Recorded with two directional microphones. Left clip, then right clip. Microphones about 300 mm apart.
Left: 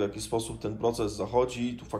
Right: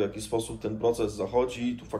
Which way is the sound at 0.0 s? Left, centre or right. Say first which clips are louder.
Right 1 dB; centre.